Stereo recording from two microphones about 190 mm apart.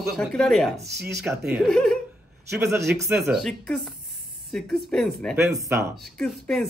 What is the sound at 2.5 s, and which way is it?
Speech, 15° right (ahead or behind).